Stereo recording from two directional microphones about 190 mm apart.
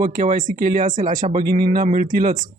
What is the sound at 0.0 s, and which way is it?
Speech, 45° right (ahead or behind).